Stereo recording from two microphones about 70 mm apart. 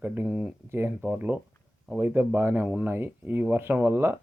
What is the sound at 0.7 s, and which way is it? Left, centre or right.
Speech, right.